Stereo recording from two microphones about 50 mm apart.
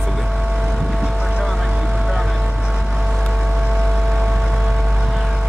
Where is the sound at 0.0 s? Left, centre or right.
Centre.